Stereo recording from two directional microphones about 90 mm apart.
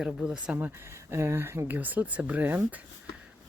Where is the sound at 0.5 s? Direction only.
25° right (ahead or behind).